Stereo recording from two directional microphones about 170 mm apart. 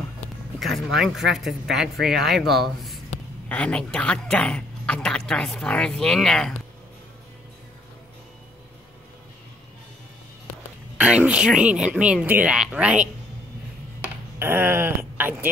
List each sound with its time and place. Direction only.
0.2 s a sound: 40° left (ahead or behind)
0.6 s a woman's voice: centre (ahead or behind)
11.0 s speech: 5° right (ahead or behind)
14.4 s speech: 10° right (ahead or behind)